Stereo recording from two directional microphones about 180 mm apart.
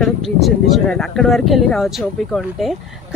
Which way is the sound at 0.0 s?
Centre (ahead or behind).